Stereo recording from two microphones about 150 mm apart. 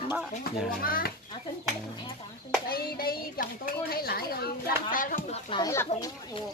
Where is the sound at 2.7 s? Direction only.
85° left; by 5.2 s 65° left (ahead or behind).